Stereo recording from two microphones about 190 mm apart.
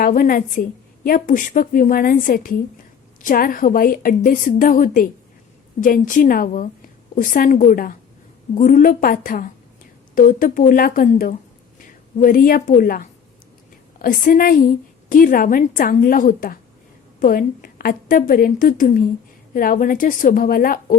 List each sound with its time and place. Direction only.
0.0 s a woman's voice: 45° left (ahead or behind)